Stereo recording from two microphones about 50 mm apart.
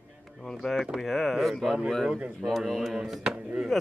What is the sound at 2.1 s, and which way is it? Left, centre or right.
Speech, right.